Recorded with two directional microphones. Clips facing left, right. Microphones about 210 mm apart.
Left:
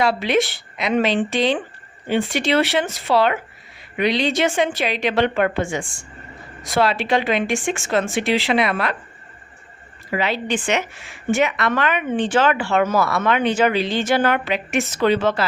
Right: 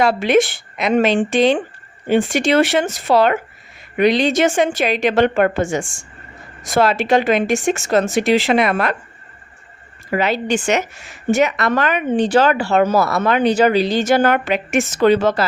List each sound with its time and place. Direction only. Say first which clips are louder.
0.0 s a woman's voice: right 4 dB; 50° right (ahead or behind)
10.1 s a woman's voice: right 4 dB; 45° right (ahead or behind)